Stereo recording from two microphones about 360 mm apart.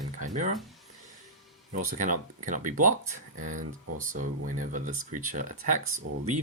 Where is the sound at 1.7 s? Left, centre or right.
Right.